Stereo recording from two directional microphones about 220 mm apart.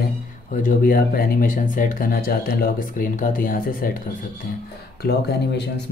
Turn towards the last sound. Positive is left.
turn(degrees=50)  # may be behind; listen again after turning